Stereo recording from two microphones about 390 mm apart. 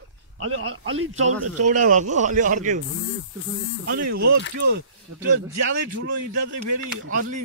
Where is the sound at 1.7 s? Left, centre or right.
Centre.